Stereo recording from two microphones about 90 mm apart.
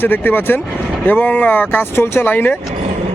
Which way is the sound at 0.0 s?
20° left (ahead or behind).